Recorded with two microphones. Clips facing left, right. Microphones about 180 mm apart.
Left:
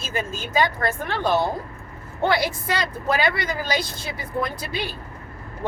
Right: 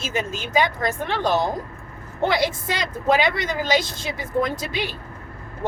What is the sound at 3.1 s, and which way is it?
Speech, 20° right (ahead or behind).